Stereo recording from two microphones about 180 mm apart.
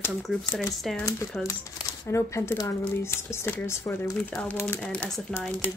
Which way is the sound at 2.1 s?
15° left (ahead or behind).